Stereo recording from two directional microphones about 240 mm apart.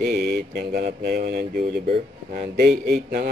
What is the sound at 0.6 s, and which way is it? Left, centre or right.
Speech, right.